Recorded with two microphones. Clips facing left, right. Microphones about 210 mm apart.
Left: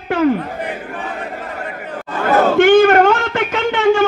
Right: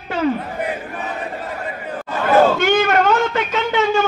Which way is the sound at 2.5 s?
50° left (ahead or behind).